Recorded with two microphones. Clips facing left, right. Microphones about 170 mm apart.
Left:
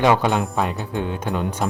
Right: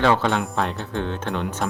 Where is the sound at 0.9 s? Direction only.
10° left (ahead or behind).